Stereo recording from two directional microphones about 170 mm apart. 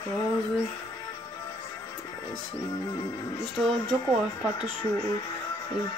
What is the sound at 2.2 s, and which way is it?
Music, 15° left (ahead or behind).